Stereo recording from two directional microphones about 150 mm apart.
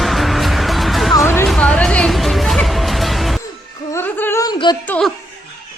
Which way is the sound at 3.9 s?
15° left (ahead or behind).